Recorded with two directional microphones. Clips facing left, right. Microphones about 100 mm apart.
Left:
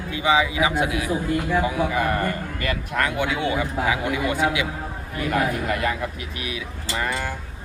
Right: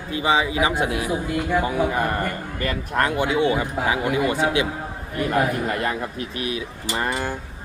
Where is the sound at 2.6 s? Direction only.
35° right (ahead or behind).